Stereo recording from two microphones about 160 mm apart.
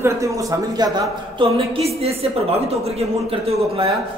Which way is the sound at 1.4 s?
40° right (ahead or behind).